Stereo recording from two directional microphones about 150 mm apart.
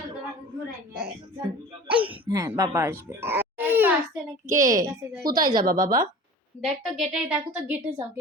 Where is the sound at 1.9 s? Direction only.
10° right (ahead or behind).